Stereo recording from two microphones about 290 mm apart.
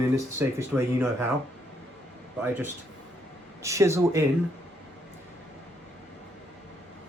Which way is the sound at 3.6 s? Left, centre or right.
Centre.